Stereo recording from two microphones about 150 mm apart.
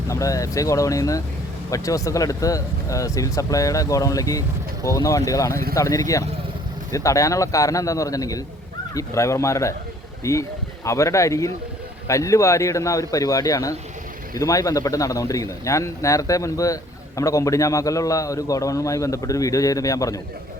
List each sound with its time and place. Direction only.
0.1 s speech: 20° left (ahead or behind)